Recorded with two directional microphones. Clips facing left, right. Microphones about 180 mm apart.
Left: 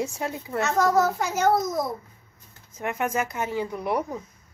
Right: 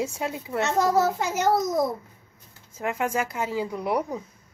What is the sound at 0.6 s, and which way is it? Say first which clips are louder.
A child's voice: even; 25° right (ahead or behind).